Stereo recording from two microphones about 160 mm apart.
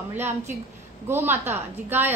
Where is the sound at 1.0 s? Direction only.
15° right (ahead or behind).